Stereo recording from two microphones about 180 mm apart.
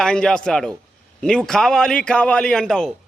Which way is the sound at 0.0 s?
5° left (ahead or behind).